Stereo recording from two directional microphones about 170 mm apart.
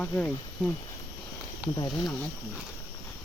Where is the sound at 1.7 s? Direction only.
25° left (ahead or behind).